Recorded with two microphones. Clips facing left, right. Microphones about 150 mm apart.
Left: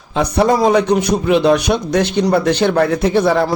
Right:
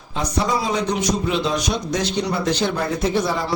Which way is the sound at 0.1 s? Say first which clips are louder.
Left 8 dB; 65° left (ahead or behind).